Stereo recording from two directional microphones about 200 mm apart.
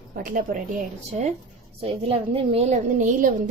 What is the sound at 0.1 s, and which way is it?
Speech, 45° right (ahead or behind).